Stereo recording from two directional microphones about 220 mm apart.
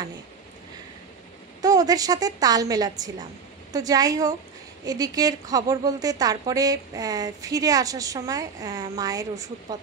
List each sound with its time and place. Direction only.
1.6 s a woman's voice: 15° right (ahead or behind)